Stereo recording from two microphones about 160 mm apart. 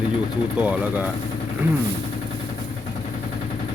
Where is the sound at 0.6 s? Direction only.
10° right (ahead or behind).